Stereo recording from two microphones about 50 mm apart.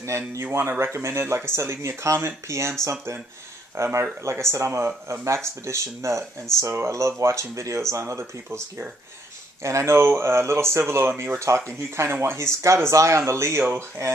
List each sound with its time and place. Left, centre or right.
0.0 s speech: right
3.7 s speech: right
6.9 s speech: right
7.9 s speech: right
9.6 s speech: right